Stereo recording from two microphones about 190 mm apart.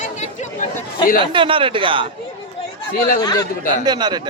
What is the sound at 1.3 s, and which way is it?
Speech, 30° right (ahead or behind).